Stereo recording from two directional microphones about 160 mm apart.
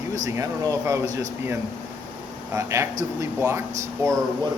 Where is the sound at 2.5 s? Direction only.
20° right (ahead or behind).